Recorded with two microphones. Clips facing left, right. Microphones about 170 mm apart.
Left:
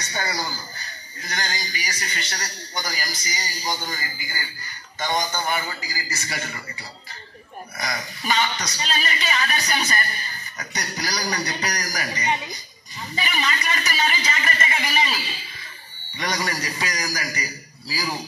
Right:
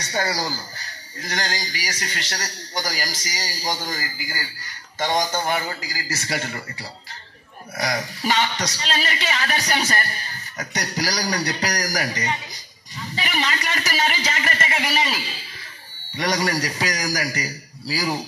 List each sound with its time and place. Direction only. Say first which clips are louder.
0.7 s a man's voice: right 2 dB; 85° right
16.2 s a man's voice: right 5 dB; 70° right (ahead or behind)